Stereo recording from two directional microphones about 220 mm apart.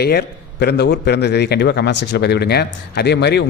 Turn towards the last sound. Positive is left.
turn(degrees=50)  # may be behind; listen again after turning